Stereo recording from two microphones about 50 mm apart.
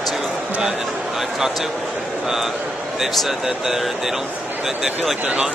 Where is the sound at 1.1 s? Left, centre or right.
Centre.